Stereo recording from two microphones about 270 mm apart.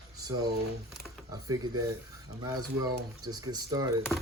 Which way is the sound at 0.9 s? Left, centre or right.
Centre.